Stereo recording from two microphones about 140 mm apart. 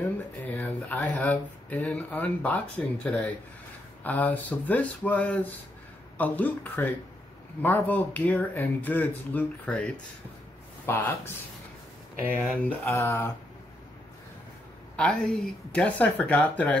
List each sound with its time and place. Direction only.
0.5 s speech: 10° left (ahead or behind)
12.4 s speech: 5° left (ahead or behind)
12.8 s speech: 20° left (ahead or behind)
15.0 s speech: 5° left (ahead or behind)